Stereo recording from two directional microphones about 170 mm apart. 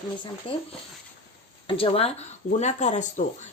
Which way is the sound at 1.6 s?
30° left (ahead or behind).